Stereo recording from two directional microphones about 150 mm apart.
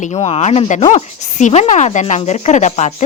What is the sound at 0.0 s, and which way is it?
A woman's voice, 50° left (ahead or behind).